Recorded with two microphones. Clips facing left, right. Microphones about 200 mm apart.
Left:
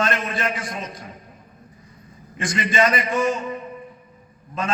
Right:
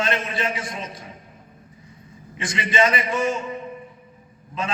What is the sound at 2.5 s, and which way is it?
Speech, 45° left (ahead or behind).